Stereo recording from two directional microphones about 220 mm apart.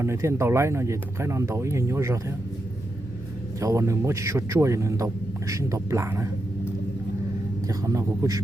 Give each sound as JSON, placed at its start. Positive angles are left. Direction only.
{"t": 0.0, "sound": "a man's voice", "side_deg": -10}
{"t": 3.6, "sound": "a man's voice", "side_deg": -15}
{"t": 7.7, "sound": "a man's voice", "side_deg": -15}